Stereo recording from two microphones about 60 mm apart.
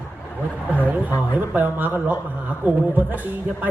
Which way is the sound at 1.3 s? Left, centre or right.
Right.